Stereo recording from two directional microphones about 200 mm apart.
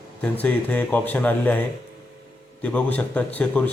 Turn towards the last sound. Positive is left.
turn(degrees=5)  # may be behind; listen again after turning